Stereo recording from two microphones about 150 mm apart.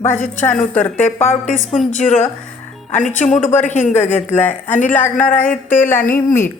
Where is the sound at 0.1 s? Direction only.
55° left (ahead or behind).